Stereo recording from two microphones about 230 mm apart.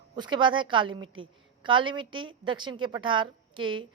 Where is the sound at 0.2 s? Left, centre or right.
Centre.